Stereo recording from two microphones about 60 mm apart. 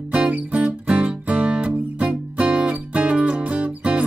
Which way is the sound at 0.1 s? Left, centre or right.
Right.